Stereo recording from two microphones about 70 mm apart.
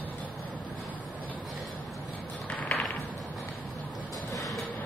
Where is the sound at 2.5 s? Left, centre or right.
Left.